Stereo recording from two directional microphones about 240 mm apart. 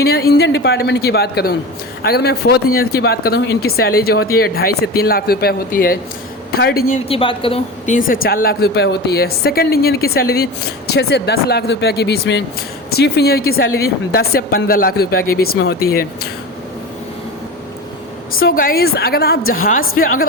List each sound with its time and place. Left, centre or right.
0.0 s speech: left
6.9 s speech: left
18.3 s speech: left